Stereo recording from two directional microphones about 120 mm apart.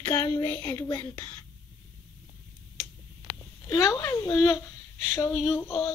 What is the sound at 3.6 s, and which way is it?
Speech, 30° left (ahead or behind).